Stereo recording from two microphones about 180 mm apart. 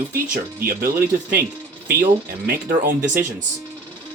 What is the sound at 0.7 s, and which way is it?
Speech, 55° right (ahead or behind).